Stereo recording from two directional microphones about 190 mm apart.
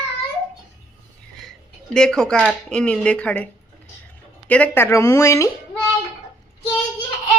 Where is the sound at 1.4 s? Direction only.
5° left (ahead or behind).